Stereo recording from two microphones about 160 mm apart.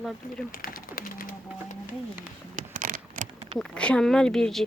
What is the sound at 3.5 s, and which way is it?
Speech, 5° left (ahead or behind).